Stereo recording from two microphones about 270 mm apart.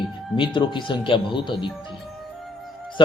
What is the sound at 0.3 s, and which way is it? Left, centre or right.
A man's voice, centre.